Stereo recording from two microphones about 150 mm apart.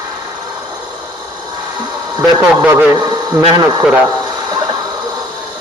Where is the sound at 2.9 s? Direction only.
30° right (ahead or behind).